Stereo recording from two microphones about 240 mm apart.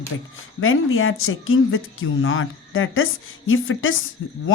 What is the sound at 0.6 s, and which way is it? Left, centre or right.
A woman's voice, left.